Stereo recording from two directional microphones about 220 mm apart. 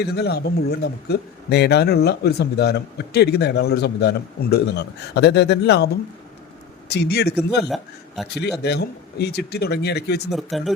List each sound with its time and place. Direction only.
0.0 s speech: 50° left (ahead or behind)
6.9 s speech: 50° left (ahead or behind)
7.6 s a man's voice: centre (ahead or behind)
8.5 s speech: 50° left (ahead or behind)
10.3 s a man's voice: centre (ahead or behind)